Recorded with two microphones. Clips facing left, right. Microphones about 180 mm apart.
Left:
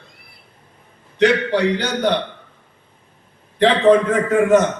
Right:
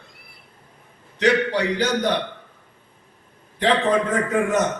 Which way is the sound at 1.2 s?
65° left (ahead or behind).